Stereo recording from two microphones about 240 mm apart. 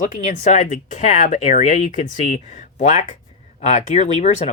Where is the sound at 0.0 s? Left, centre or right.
Left.